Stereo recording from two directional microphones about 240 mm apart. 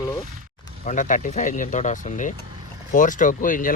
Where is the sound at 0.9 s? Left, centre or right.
Left.